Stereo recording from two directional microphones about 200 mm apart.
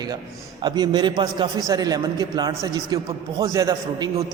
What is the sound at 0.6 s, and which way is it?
A man's voice, 20° right (ahead or behind).